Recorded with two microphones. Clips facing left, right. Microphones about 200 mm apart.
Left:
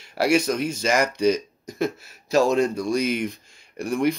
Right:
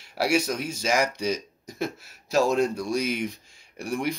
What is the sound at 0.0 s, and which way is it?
A man's voice, 5° right (ahead or behind).